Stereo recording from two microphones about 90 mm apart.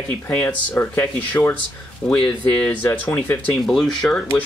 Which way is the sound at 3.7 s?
5° left (ahead or behind).